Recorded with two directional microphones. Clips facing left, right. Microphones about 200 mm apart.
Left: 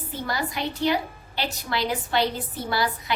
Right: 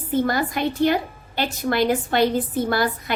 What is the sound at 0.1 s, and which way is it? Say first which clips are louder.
A woman's voice: right 9 dB; 50° right (ahead or behind).